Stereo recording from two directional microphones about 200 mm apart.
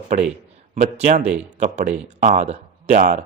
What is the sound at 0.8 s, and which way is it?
A man's voice, 35° right (ahead or behind).